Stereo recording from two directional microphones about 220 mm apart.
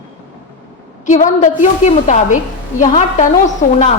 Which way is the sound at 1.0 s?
35° left (ahead or behind).